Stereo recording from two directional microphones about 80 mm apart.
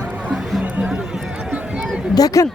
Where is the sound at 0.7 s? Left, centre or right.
Centre.